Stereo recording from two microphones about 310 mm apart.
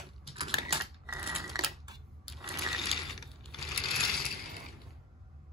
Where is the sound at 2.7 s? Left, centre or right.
Centre.